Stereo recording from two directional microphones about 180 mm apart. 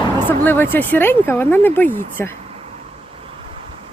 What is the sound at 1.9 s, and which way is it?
Speech, 45° right (ahead or behind).